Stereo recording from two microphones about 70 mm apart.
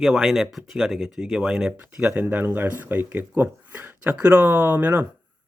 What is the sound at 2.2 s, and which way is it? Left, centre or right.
Speech, right.